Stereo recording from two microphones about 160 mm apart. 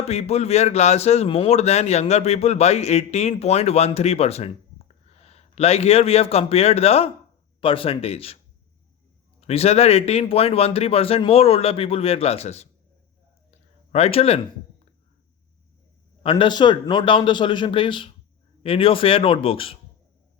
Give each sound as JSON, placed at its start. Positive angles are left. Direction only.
{"t": 0.1, "sound": "a man's voice", "side_deg": 40}
{"t": 9.4, "sound": "a man's voice", "side_deg": 40}
{"t": 13.5, "sound": "a sound", "side_deg": 40}
{"t": 16.2, "sound": "a man's voice", "side_deg": 30}